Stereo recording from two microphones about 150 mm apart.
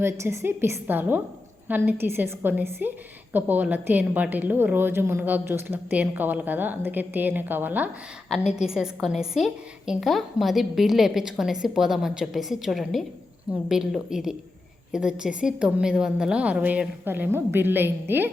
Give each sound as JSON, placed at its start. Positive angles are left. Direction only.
{"t": 0.0, "sound": "a woman's voice", "side_deg": -15}